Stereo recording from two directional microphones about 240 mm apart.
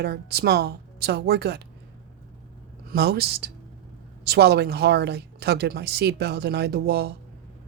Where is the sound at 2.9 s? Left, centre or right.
Right.